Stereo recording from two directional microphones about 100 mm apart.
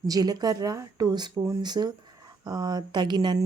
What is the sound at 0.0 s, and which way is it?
Speech, 40° right (ahead or behind).